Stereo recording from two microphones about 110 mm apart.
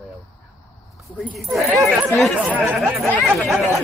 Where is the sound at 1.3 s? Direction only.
Centre (ahead or behind).